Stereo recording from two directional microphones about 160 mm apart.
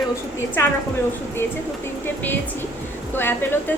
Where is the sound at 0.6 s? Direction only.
15° left (ahead or behind).